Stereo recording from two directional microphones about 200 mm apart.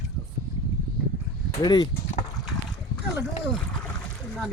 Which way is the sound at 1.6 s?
20° left (ahead or behind).